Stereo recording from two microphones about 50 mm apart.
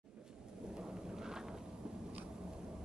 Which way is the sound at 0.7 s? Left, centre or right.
Centre.